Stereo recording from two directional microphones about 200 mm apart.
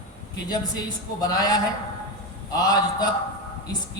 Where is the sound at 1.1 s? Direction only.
20° left (ahead or behind).